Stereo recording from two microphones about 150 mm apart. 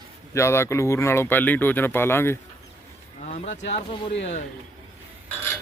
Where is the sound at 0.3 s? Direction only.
15° left (ahead or behind).